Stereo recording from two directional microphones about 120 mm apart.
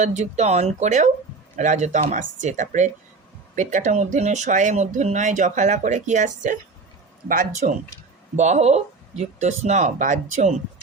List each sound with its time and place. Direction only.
0.0 s speech: 75° right (ahead or behind)
7.6 s speech: 90° right
8.4 s speech: 75° right (ahead or behind)